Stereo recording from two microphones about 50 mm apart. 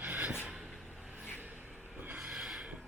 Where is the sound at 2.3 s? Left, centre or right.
Centre.